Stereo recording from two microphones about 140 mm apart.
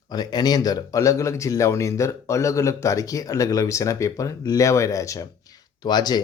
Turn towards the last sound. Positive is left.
turn(degrees=30)  # may be behind; listen again after turning